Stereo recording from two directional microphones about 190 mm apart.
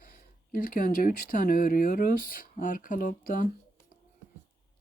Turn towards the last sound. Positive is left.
turn(degrees=45)  # may be behind; listen again after turning